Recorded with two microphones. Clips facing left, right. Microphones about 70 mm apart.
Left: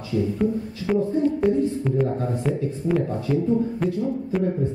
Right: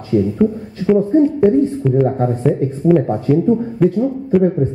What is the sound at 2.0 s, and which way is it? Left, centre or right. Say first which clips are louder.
A woman's voice: right 9 dB; right.